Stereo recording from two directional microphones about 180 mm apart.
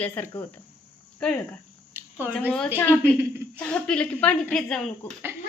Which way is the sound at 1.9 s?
10° right (ahead or behind).